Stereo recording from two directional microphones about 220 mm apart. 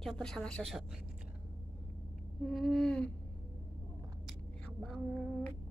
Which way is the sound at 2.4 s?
Centre (ahead or behind).